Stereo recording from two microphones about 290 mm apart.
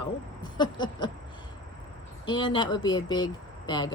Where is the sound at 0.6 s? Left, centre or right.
Centre.